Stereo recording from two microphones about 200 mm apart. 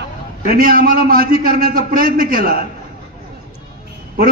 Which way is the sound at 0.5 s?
45° right (ahead or behind).